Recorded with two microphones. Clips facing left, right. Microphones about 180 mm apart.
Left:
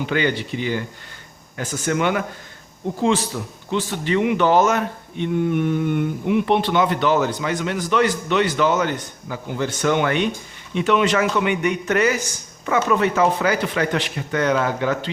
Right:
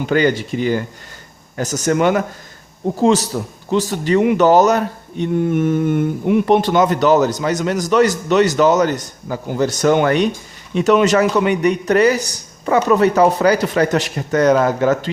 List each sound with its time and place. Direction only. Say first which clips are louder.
0.0 s a man's voice: right 6 dB; 45° right (ahead or behind)